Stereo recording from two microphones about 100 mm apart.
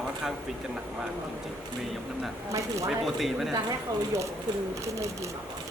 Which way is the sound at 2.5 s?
30° right (ahead or behind).